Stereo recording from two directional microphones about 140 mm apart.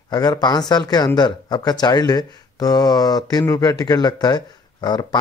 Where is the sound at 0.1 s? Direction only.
30° left (ahead or behind).